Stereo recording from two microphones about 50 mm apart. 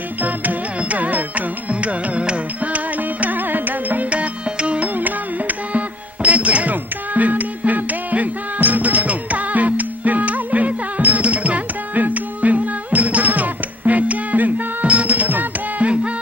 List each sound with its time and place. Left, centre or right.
0.2 s music: right